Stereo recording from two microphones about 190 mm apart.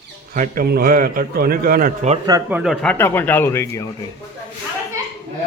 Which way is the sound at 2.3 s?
15° right (ahead or behind).